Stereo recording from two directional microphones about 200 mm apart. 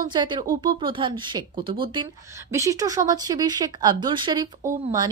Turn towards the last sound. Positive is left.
turn(degrees=-20)  # may be behind; listen again after turning